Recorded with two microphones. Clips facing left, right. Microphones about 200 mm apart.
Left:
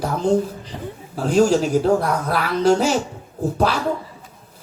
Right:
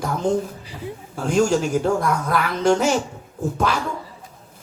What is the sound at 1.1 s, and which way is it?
A man's voice, 35° left (ahead or behind).